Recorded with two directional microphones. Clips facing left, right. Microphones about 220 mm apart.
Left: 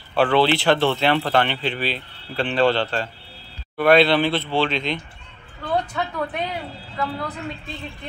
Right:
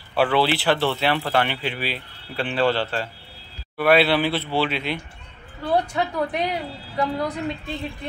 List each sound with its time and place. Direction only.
0.1 s speech: 10° right (ahead or behind)
5.7 s a sound: 35° right (ahead or behind)
7.0 s speech: 15° right (ahead or behind)